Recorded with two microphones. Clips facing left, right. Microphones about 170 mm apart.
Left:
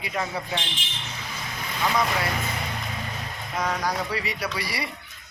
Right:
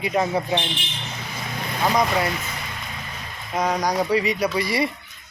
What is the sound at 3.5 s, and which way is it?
Speech, 20° right (ahead or behind).